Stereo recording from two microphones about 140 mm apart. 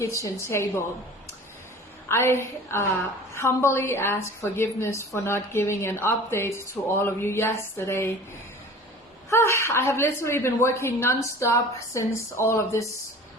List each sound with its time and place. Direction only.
0.0 s a woman's voice: 20° left (ahead or behind)
2.0 s a woman's voice: 20° left (ahead or behind)
9.3 s a woman's voice: 20° left (ahead or behind)